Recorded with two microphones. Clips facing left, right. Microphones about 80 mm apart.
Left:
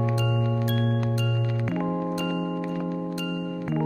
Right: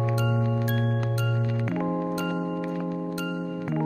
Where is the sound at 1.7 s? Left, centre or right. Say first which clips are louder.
Even; centre.